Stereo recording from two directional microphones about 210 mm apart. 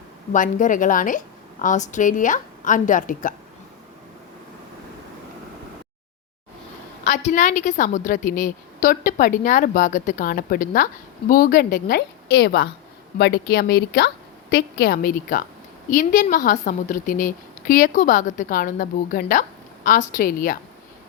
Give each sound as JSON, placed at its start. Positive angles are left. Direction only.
{"t": 0.3, "sound": "a woman's voice", "side_deg": 40}
{"t": 7.0, "sound": "a woman's voice", "side_deg": 35}